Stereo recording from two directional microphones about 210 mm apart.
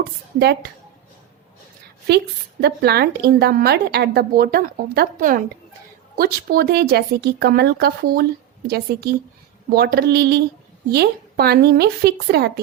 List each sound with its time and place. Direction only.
0.0 s a woman's voice: 50° right (ahead or behind)
2.0 s a woman's voice: 50° right (ahead or behind)